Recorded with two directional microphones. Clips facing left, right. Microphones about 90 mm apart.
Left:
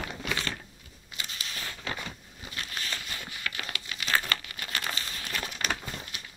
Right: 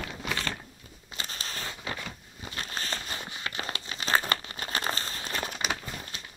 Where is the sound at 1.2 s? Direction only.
35° right (ahead or behind).